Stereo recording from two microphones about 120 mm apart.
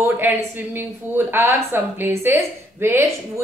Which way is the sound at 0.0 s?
15° right (ahead or behind).